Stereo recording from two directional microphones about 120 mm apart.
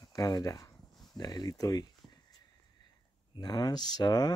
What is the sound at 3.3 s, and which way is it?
Speech, 35° left (ahead or behind).